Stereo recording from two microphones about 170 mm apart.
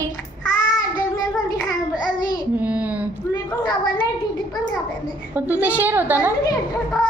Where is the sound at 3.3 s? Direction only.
25° left (ahead or behind).